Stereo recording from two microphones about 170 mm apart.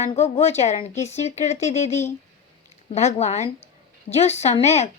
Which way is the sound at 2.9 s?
40° left (ahead or behind).